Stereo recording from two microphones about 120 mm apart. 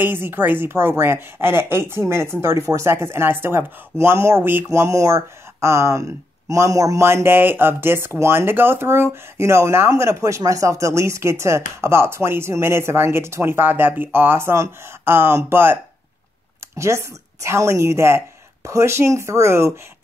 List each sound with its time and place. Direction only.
0.0 s speech: 20° right (ahead or behind)